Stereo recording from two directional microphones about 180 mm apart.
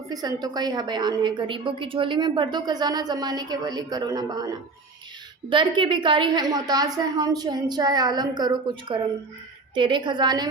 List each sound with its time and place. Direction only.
0.1 s a woman's voice: 20° right (ahead or behind)